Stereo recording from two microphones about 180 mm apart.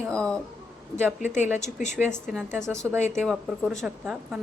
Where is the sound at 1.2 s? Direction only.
40° left (ahead or behind).